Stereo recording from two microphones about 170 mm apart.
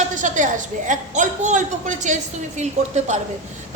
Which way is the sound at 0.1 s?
50° right (ahead or behind).